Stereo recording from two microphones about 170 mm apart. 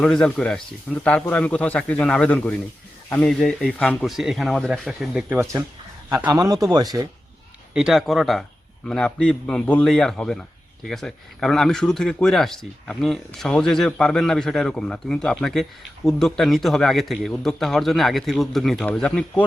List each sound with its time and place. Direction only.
0.0 s speech: 5° left (ahead or behind)
5.4 s a man's voice: 20° right (ahead or behind)
7.7 s speech: 5° right (ahead or behind)